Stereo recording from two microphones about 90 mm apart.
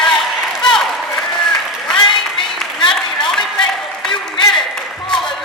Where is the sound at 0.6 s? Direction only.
5° left (ahead or behind).